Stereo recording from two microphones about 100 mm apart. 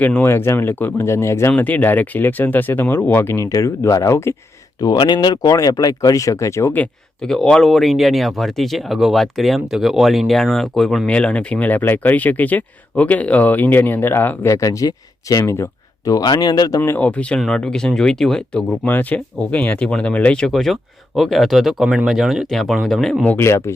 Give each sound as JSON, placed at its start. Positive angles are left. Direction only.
{"t": 0.0, "sound": "speech", "side_deg": 20}
{"t": 1.5, "sound": "speech", "side_deg": 15}
{"t": 4.8, "sound": "speech", "side_deg": 45}
{"t": 7.2, "sound": "speech", "side_deg": 5}
{"t": 16.8, "sound": "speech", "side_deg": 20}
{"t": 18.9, "sound": "speech", "side_deg": 15}
{"t": 23.4, "sound": "speech", "side_deg": 25}